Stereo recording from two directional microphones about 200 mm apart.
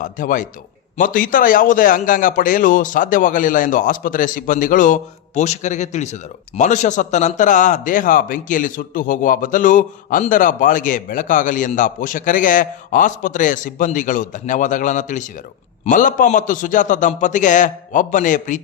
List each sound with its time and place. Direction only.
0.0 s a man's voice: 40° left (ahead or behind)